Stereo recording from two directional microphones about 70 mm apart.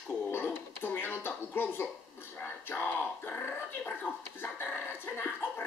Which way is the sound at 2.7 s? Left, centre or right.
Left.